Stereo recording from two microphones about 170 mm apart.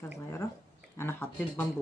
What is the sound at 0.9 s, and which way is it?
Speech, 15° left (ahead or behind).